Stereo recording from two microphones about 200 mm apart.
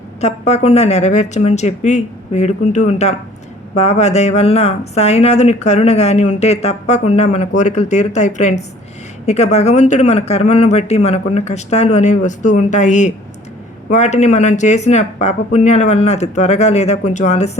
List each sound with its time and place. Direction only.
0.2 s speech: 35° left (ahead or behind)